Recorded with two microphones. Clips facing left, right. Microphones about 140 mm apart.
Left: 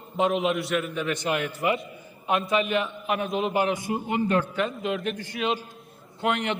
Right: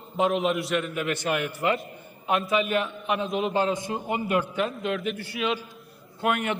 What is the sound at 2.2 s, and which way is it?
A man's voice, centre (ahead or behind).